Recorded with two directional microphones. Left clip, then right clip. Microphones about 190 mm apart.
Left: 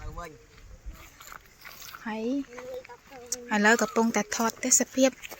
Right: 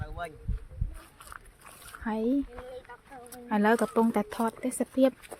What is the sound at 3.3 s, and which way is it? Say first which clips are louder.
Speech: left 3 dB; 10° right (ahead or behind).